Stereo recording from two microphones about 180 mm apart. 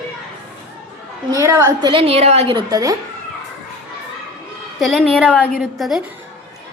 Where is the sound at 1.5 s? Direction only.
15° right (ahead or behind).